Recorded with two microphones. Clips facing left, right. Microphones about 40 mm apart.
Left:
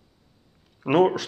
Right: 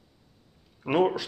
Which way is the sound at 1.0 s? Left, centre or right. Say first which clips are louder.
Left 3 dB; left.